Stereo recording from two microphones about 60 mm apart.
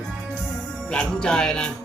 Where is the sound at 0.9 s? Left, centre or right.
Centre.